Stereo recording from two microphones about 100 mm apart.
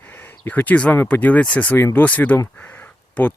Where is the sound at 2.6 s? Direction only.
15° left (ahead or behind).